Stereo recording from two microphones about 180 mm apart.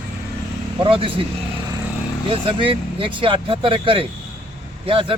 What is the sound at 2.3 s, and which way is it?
Speech, 30° right (ahead or behind).